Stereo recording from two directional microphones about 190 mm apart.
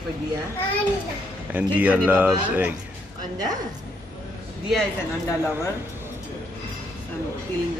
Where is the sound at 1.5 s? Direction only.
10° right (ahead or behind).